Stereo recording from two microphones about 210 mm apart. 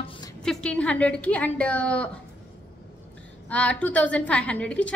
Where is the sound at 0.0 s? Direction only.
25° left (ahead or behind).